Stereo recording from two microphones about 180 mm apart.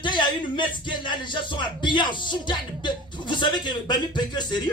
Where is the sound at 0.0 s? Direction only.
25° left (ahead or behind).